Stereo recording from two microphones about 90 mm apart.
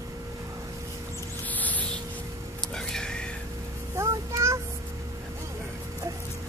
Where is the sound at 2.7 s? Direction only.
5° left (ahead or behind).